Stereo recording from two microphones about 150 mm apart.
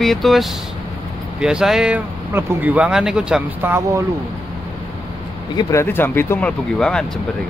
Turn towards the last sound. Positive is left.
turn(degrees=5)  # may be behind; listen again after turning